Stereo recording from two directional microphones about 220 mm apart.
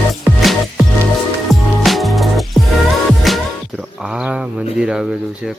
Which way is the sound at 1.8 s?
Centre (ahead or behind).